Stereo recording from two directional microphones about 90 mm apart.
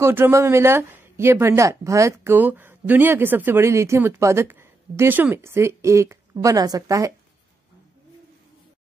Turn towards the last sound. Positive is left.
turn(degrees=-40)  # may be behind; listen again after turning